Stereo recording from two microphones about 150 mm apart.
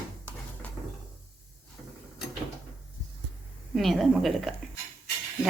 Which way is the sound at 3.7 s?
Centre (ahead or behind).